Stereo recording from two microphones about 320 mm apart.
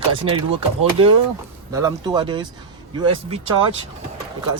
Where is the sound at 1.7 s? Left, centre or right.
Centre.